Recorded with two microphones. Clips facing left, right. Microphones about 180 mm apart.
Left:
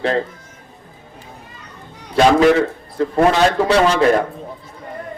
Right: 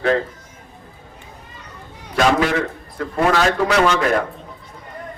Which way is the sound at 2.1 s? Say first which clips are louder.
Left 5 dB; 30° left (ahead or behind).